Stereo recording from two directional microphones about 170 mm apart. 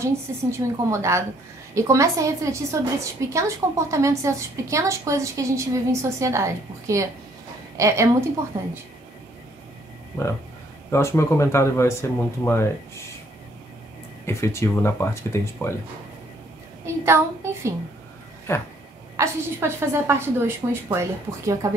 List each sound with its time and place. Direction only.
0.0 s a woman's voice: 15° right (ahead or behind)
10.9 s speech: 15° left (ahead or behind)
14.2 s speech: 15° left (ahead or behind)
16.8 s a woman's voice: 15° right (ahead or behind)
18.5 s speech: 15° left (ahead or behind)
19.1 s a woman's voice: 15° right (ahead or behind)